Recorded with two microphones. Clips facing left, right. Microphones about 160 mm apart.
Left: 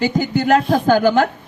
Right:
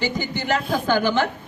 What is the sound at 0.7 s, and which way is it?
Speech, 45° left (ahead or behind).